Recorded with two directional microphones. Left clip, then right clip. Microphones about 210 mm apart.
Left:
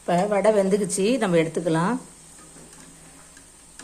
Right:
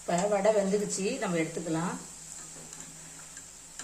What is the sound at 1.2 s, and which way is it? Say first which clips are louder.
Speech: left 10 dB; 45° left (ahead or behind).